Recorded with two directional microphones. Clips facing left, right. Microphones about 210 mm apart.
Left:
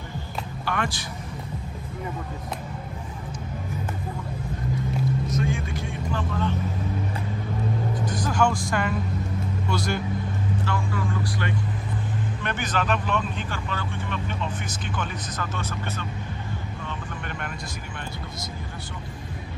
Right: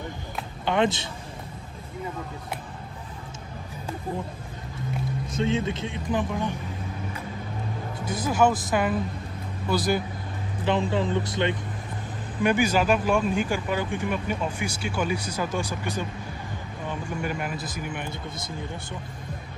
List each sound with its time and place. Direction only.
0.7 s speech: 20° right (ahead or behind)
5.3 s speech: 25° right (ahead or behind)
8.0 s speech: 5° right (ahead or behind)
10.6 s speech: 20° right (ahead or behind)
12.4 s speech: 10° right (ahead or behind)